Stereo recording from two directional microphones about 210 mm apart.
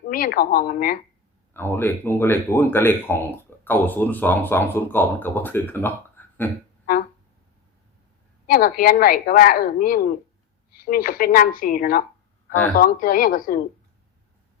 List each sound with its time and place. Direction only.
0.1 s speech: 40° left (ahead or behind)
1.5 s speech: 10° left (ahead or behind)
8.4 s speech: 45° left (ahead or behind)